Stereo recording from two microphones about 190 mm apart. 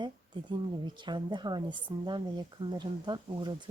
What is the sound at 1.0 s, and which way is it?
Speech, 25° right (ahead or behind).